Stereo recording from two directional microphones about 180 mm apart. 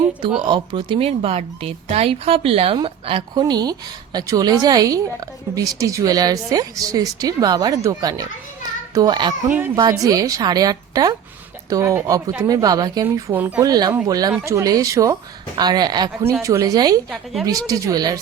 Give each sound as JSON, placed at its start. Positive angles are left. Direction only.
{"t": 0.3, "sound": "speech", "side_deg": -25}
{"t": 9.5, "sound": "a child's voice", "side_deg": -10}
{"t": 9.7, "sound": "speech", "side_deg": -20}